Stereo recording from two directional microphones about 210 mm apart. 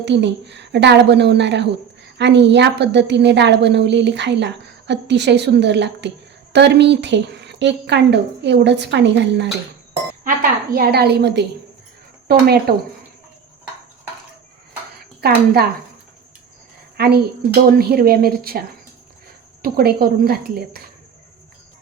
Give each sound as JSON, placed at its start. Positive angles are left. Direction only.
{"t": 0.0, "sound": "a woman's voice", "side_deg": -55}
{"t": 10.2, "sound": "a woman's voice", "side_deg": -45}
{"t": 15.2, "sound": "a woman's voice", "side_deg": -50}
{"t": 17.0, "sound": "a woman's voice", "side_deg": -50}
{"t": 19.6, "sound": "a woman's voice", "side_deg": -45}